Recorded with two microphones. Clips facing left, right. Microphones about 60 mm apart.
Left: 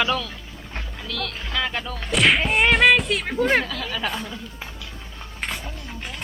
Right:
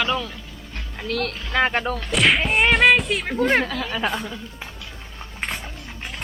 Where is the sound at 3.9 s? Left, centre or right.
Right.